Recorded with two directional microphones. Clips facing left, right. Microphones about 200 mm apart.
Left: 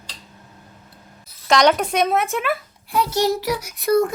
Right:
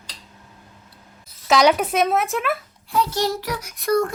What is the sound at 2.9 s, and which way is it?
Child singing, 10° left (ahead or behind).